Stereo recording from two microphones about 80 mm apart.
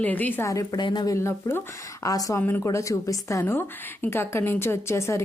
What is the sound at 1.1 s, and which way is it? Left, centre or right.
Speech, left.